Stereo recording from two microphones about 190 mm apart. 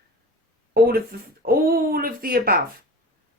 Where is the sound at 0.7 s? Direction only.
50° right (ahead or behind).